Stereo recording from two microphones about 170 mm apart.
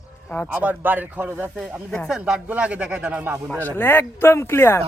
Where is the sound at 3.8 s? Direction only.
10° left (ahead or behind).